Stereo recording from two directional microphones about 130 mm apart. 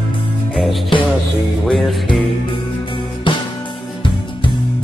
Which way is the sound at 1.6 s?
Centre (ahead or behind).